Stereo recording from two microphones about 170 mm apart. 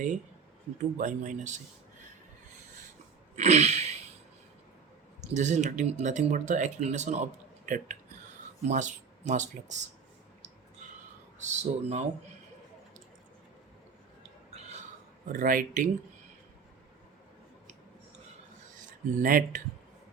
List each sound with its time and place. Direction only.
0.8 s speech: 50° right (ahead or behind)
3.3 s sneeze: 40° right (ahead or behind)
5.3 s speech: 45° right (ahead or behind)
11.3 s speech: 45° right (ahead or behind)
14.5 s a sound: 40° right (ahead or behind)
15.3 s speech: 55° right (ahead or behind)
19.1 s speech: 55° right (ahead or behind)